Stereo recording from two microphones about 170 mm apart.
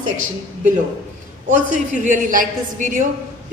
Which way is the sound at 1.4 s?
45° right (ahead or behind).